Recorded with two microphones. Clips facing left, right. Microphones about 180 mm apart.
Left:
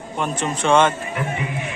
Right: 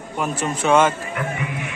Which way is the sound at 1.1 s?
25° left (ahead or behind).